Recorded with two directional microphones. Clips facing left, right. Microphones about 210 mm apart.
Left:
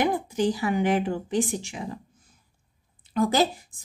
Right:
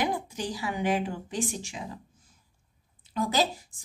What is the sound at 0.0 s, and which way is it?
A woman's voice, 55° left (ahead or behind).